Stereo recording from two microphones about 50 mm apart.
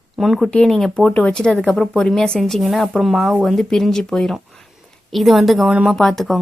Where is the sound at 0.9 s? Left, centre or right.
Left.